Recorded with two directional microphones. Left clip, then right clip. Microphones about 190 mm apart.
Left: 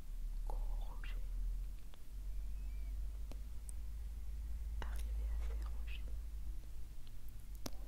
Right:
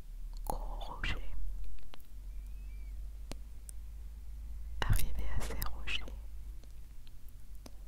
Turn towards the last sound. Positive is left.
turn(degrees=5)  # may be behind; listen again after turning